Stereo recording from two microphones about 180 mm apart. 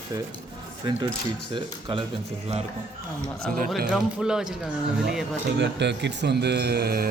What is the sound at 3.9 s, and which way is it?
Speech, 5° right (ahead or behind).